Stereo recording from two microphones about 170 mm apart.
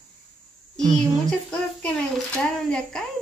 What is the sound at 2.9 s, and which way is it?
Speech, 5° left (ahead or behind).